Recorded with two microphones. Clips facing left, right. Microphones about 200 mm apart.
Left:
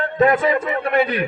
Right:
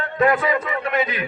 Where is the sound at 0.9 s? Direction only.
60° left (ahead or behind).